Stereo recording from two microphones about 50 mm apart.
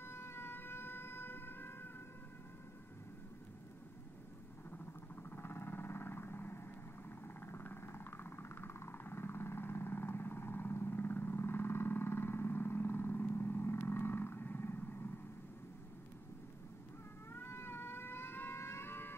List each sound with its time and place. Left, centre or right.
0.0 s siren: left
4.6 s vehicle: left
17.3 s cat: left